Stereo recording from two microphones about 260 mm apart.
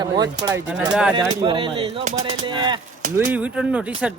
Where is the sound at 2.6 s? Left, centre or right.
Centre.